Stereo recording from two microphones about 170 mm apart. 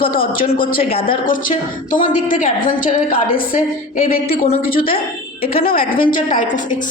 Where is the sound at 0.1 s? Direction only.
55° left (ahead or behind).